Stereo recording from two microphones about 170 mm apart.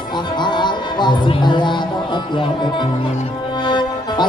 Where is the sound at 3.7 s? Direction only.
25° left (ahead or behind).